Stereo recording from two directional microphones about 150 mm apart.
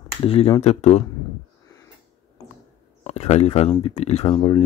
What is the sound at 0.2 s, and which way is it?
Speech, 40° left (ahead or behind).